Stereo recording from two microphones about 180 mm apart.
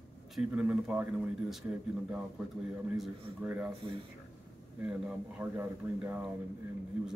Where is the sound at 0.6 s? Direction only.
5° right (ahead or behind).